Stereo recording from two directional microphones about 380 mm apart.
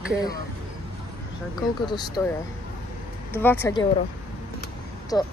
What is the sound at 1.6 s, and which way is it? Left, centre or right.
Speech, centre.